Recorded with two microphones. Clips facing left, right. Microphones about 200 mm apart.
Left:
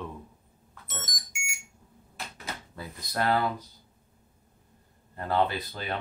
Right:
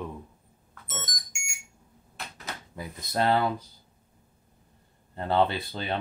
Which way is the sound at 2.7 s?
20° right (ahead or behind).